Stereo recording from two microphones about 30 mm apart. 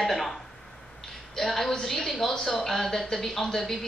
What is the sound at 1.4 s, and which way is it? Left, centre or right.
Speech, centre.